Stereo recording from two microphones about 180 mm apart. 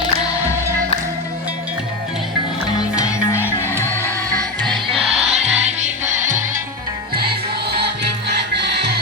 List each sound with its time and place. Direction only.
2.9 s music: 15° left (ahead or behind)
4.6 s music: centre (ahead or behind)
5.1 s music: 35° right (ahead or behind)
8.0 s music: 65° right (ahead or behind)